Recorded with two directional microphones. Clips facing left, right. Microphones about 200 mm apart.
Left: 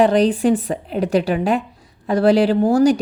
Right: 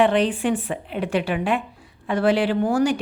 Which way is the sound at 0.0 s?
40° left (ahead or behind).